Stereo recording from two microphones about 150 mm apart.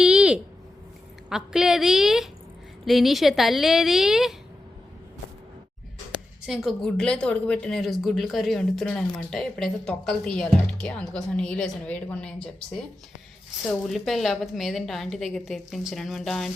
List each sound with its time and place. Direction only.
0.0 s a sound: 5° right (ahead or behind)
1.3 s a woman's voice: 5° right (ahead or behind)
6.4 s a woman's voice: centre (ahead or behind)